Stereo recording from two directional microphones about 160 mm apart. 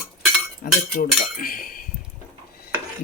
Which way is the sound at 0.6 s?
65° left (ahead or behind).